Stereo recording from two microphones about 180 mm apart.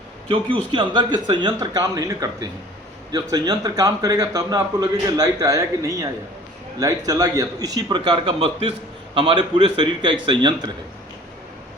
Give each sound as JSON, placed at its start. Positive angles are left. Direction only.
{"t": 0.3, "sound": "a man's voice", "side_deg": -25}